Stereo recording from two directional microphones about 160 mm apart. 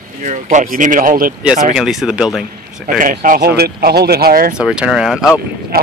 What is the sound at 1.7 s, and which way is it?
Speech, 5° right (ahead or behind).